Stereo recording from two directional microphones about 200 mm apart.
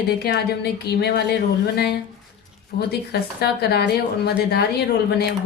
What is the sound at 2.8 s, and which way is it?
A woman's voice, 55° left (ahead or behind).